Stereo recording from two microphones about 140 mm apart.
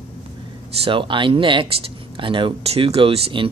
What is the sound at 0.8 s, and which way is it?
Speech, 35° right (ahead or behind).